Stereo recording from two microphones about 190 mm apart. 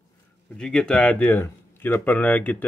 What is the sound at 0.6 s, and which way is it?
Speech, 5° left (ahead or behind).